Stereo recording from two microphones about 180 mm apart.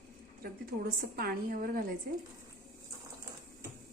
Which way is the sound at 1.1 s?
55° right (ahead or behind).